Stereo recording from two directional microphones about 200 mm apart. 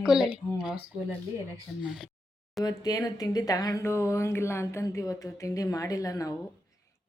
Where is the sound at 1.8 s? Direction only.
Centre (ahead or behind).